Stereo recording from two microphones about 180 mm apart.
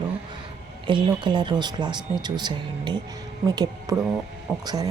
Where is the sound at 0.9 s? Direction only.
25° right (ahead or behind).